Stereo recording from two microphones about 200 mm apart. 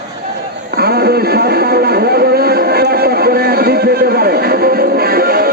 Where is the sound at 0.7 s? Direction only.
50° right (ahead or behind).